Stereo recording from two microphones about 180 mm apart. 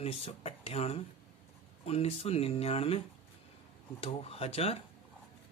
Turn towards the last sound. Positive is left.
turn(degrees=35)  # may be behind; listen again after turning